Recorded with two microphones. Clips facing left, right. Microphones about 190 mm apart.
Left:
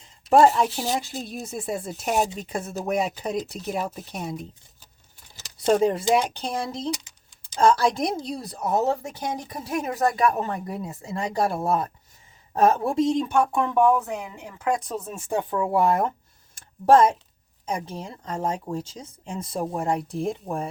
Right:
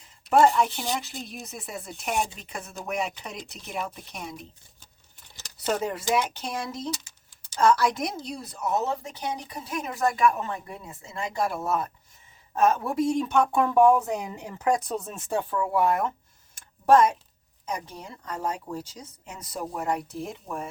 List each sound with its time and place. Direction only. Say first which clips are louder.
0.3 s speech: left 3 dB; 30° left (ahead or behind)
5.6 s speech: left 7 dB; 30° left (ahead or behind)
13.2 s speech: left 1 dB; 10° left (ahead or behind)
13.5 s speech: right 4 dB; 5° right (ahead or behind)
14.8 s speech: left 1 dB; 5° left (ahead or behind)
15.8 s speech: left 2 dB; 30° left (ahead or behind)
16.6 s a sound: left 2 dB; 30° left (ahead or behind)
17.7 s speech: left 4 dB; 30° left (ahead or behind)